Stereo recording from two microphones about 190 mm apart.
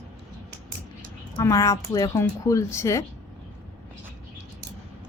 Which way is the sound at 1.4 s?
15° left (ahead or behind).